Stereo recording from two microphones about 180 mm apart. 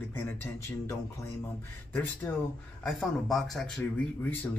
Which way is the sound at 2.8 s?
5° left (ahead or behind).